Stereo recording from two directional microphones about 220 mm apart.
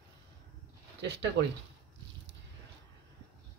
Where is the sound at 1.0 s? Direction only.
50° right (ahead or behind).